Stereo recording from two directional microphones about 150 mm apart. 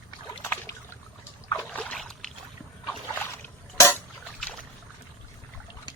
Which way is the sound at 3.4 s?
15° left (ahead or behind).